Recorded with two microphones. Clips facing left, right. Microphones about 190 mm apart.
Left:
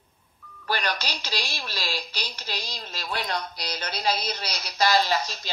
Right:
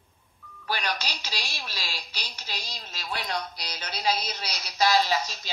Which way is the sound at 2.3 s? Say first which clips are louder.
Left 4 dB; 55° left (ahead or behind).